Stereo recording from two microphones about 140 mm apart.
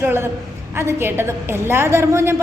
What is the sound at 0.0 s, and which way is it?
A woman's voice, 15° right (ahead or behind).